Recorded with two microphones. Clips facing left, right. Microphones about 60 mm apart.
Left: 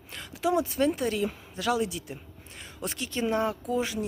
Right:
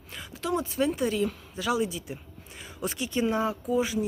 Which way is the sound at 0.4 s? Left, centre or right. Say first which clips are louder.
Left 2 dB; centre.